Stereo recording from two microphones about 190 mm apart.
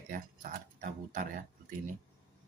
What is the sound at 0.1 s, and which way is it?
Speech, 45° right (ahead or behind).